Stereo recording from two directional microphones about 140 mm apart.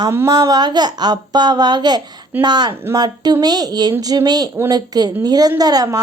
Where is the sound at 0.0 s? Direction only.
20° right (ahead or behind).